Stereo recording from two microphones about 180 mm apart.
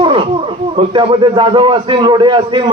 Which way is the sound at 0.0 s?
30° right (ahead or behind).